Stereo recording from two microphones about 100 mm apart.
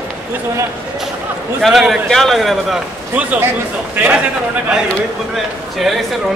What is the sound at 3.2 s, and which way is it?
A man's voice, 15° right (ahead or behind).